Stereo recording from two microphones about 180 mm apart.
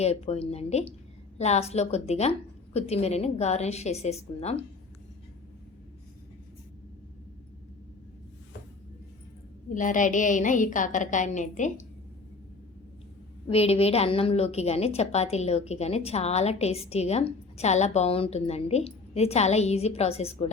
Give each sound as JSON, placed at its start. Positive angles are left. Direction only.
{"t": 0.0, "sound": "a woman's voice", "side_deg": 35}
{"t": 9.6, "sound": "a woman's voice", "side_deg": 45}
{"t": 13.5, "sound": "a woman's voice", "side_deg": 35}